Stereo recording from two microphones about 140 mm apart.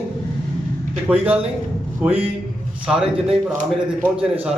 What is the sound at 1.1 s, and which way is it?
A man's voice, 10° right (ahead or behind).